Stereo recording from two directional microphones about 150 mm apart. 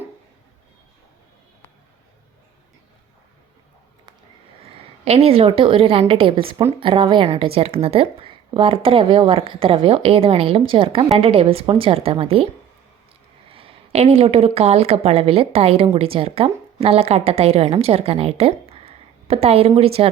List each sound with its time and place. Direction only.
4.8 s speech: 40° right (ahead or behind)
13.5 s a woman's voice: 35° right (ahead or behind)